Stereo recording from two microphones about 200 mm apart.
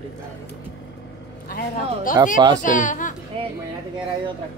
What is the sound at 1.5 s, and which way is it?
Speech, 45° left (ahead or behind).